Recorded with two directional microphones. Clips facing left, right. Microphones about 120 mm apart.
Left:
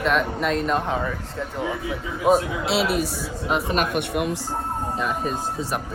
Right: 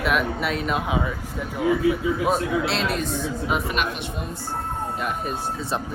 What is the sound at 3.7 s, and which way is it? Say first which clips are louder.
Speech: left 4 dB; 45° left (ahead or behind).